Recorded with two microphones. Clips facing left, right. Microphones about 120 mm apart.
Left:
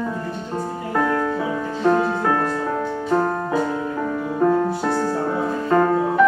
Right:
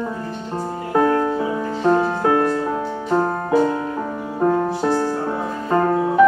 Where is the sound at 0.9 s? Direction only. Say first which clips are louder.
Right 4 dB; 20° right (ahead or behind).